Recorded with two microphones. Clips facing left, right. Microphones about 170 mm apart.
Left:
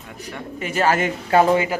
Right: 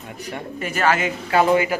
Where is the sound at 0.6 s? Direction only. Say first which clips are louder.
Left 1 dB; 25° left (ahead or behind).